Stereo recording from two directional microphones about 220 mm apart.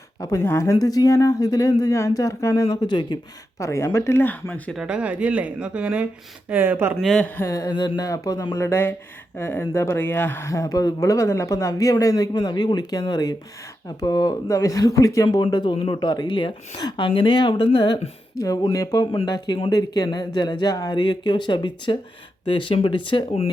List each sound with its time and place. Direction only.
0.2 s speech: 15° left (ahead or behind); by 6.9 s 10° right (ahead or behind)
6.9 s speech: centre (ahead or behind)
7.4 s speech: 15° left (ahead or behind)